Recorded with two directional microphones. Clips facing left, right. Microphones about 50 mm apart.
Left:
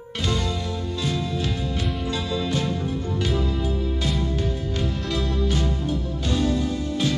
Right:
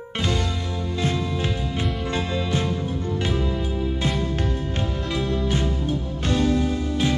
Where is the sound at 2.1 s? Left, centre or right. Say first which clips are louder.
Even; right.